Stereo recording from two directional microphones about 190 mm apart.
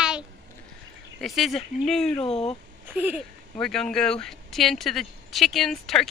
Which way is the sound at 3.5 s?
5° left (ahead or behind).